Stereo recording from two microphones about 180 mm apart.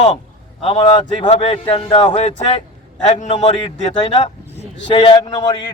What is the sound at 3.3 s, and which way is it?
Speech, 30° left (ahead or behind).